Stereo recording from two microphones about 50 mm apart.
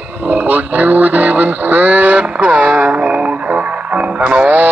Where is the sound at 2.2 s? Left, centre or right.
Right.